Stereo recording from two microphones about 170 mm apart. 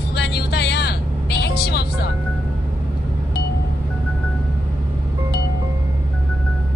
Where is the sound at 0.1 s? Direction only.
70° left (ahead or behind).